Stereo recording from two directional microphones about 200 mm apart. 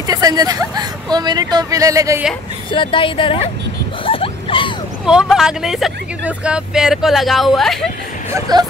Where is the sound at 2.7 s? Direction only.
25° left (ahead or behind).